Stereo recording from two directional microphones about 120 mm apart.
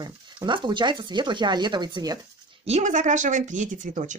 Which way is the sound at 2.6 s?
75° right (ahead or behind).